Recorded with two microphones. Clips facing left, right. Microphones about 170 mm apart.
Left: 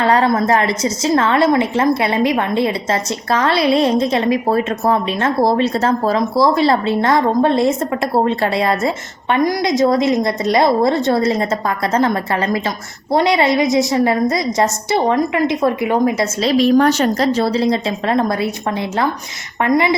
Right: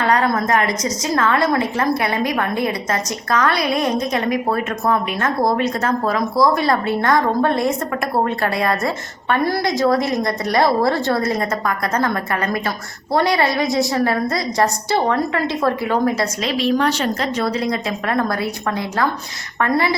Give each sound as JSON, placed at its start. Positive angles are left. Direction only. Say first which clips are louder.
{"t": 0.0, "sound": "a woman's voice", "louder": "left 3 dB", "side_deg": 30}
{"t": 13.1, "sound": "a woman's voice", "louder": "left 3 dB", "side_deg": 20}
{"t": 16.4, "sound": "a woman's voice", "louder": "left 8 dB", "side_deg": 40}
{"t": 17.3, "sound": "a woman's voice", "louder": "left 5 dB", "side_deg": 30}
{"t": 19.6, "sound": "a woman's voice", "louder": "left 4 dB", "side_deg": 20}